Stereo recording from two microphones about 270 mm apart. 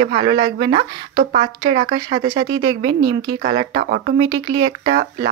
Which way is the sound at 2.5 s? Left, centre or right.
Centre.